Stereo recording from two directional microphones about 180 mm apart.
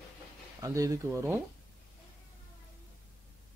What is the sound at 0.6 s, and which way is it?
Speech, 20° right (ahead or behind).